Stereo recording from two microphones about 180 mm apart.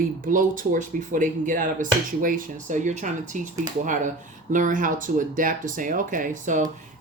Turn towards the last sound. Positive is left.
turn(degrees=-45)  # may be behind; listen again after turning